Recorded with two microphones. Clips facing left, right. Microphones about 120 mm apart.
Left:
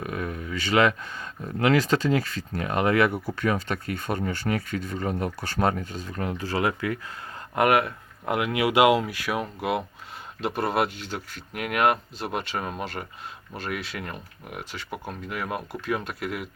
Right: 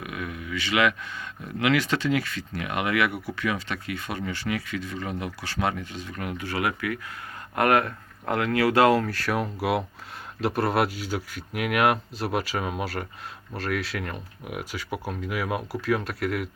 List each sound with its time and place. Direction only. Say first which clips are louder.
0.0 s speech: left 3 dB; 35° left (ahead or behind)
7.5 s speech: left 1 dB; 15° left (ahead or behind); by 16.5 s centre (ahead or behind)